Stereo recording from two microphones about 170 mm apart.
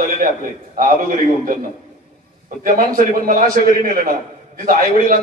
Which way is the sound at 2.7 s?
55° right (ahead or behind).